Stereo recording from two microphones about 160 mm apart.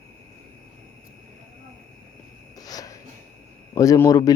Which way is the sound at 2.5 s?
25° left (ahead or behind).